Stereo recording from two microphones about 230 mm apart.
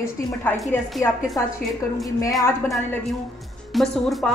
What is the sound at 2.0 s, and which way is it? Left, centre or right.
Speech, centre.